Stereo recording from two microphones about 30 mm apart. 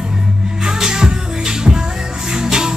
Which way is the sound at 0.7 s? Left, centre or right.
Right.